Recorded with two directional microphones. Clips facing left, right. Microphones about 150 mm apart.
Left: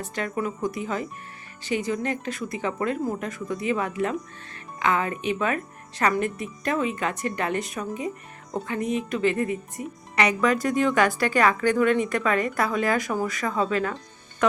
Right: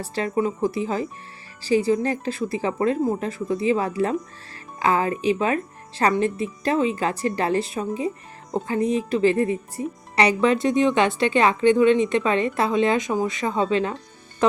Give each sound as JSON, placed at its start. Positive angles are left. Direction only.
{"t": 0.0, "sound": "speech", "side_deg": -30}